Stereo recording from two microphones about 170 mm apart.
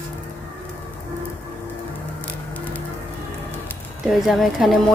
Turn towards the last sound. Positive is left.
turn(degrees=0)  # may be behind; listen again after turning